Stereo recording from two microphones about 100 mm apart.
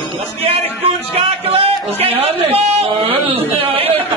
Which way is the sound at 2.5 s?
90° right.